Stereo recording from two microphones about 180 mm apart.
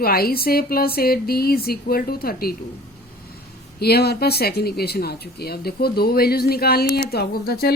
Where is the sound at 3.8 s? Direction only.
60° left (ahead or behind).